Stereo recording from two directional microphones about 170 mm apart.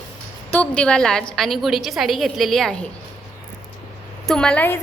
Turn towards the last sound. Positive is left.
turn(degrees=10)  # may be behind; listen again after turning